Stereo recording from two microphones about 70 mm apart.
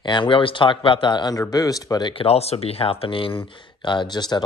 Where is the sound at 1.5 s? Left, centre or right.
Left.